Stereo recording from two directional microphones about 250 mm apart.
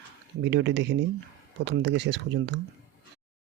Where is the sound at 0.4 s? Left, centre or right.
Right.